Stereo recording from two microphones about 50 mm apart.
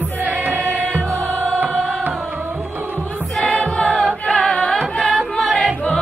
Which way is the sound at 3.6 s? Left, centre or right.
Centre.